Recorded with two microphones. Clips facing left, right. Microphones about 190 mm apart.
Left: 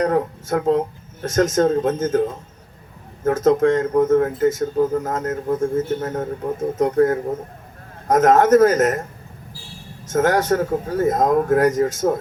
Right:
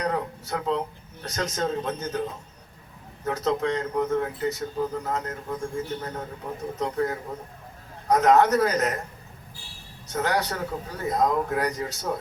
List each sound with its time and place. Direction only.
0.0 s speech: 45° left (ahead or behind)
10.1 s speech: 45° left (ahead or behind)